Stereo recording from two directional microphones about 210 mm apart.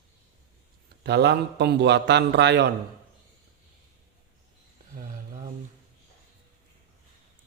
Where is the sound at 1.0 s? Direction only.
55° right (ahead or behind).